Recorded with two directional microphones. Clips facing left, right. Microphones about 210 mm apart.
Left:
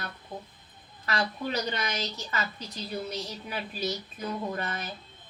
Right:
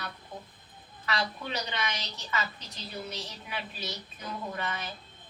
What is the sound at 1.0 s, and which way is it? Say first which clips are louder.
A woman's voice: left 3 dB; 40° left (ahead or behind).